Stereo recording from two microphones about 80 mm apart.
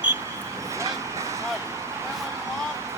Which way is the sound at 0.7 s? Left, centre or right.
Right.